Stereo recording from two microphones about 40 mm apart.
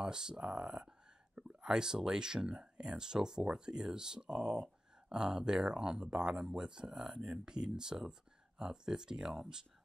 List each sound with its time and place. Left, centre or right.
0.0 s speech: centre